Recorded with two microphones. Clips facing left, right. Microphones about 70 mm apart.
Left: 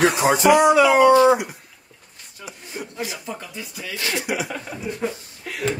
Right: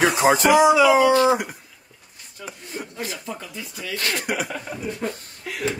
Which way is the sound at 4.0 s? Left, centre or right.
Right.